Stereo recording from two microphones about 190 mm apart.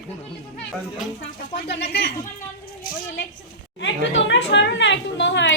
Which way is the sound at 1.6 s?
65° left (ahead or behind).